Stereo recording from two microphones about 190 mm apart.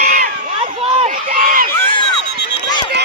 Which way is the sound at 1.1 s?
45° right (ahead or behind).